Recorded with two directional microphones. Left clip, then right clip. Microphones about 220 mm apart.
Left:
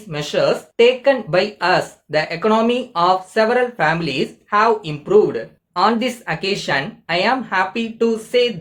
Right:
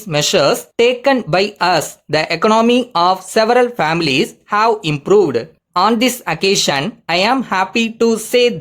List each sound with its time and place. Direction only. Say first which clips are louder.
0.1 s speech: right 5 dB; 45° right (ahead or behind)